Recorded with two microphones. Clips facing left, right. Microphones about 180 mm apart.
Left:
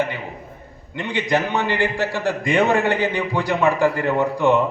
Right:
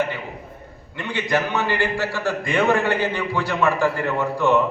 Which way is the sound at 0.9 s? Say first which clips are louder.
Left 2 dB; 20° left (ahead or behind).